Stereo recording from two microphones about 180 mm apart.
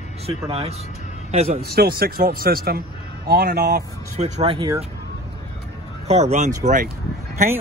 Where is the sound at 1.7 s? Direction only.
60° right (ahead or behind).